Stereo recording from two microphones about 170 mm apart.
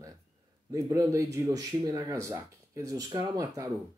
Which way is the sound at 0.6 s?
20° right (ahead or behind).